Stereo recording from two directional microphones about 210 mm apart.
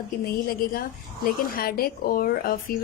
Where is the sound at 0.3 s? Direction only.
45° left (ahead or behind).